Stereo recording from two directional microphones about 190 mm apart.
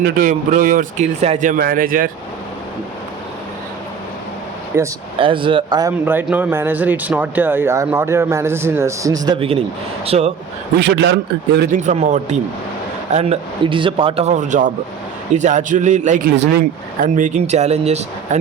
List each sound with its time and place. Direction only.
0.0 s speech: 45° right (ahead or behind)
4.7 s speech: 10° right (ahead or behind)
5.2 s speech: 25° right (ahead or behind)
6.1 s a man's voice: 10° right (ahead or behind); by 10.3 s 30° right (ahead or behind)
10.8 s a man's voice: 65° right (ahead or behind)
11.5 s speech: 55° right (ahead or behind)
11.9 s a man's voice: 40° right (ahead or behind)